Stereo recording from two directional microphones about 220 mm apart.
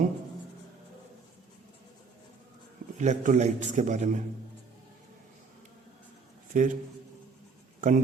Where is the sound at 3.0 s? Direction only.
35° right (ahead or behind).